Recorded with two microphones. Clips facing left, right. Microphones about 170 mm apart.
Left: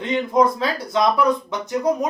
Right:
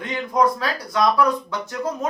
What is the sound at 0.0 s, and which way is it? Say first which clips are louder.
Speech: left 3 dB; 25° left (ahead or behind).